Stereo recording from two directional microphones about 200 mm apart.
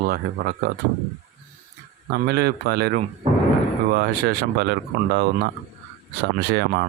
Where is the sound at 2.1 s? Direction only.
50° right (ahead or behind).